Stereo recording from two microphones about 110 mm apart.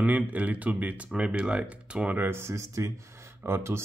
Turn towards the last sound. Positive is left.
turn(degrees=-25)  # may be behind; listen again after turning